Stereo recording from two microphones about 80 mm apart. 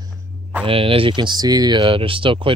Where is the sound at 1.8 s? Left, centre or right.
Right.